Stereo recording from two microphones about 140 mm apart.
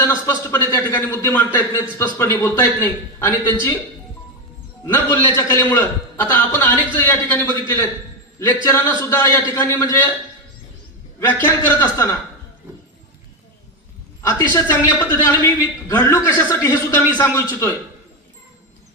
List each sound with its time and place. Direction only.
0.1 s a man's voice: 15° left (ahead or behind)
4.9 s a man's voice: 15° left (ahead or behind)
11.2 s a man's voice: 15° left (ahead or behind)
14.2 s a man's voice: 15° left (ahead or behind)